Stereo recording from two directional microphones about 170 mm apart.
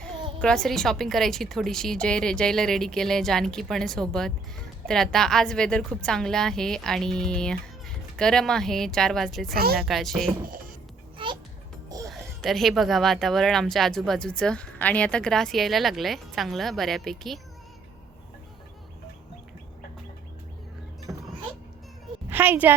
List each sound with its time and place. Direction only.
0.0 s speech: 5° left (ahead or behind)
11.2 s music: 30° right (ahead or behind)
12.0 s speech: centre (ahead or behind)
21.1 s a sound: 15° right (ahead or behind)
22.3 s a woman's voice: 10° right (ahead or behind)